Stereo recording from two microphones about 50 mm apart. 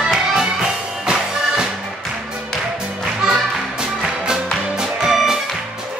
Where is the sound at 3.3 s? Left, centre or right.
Centre.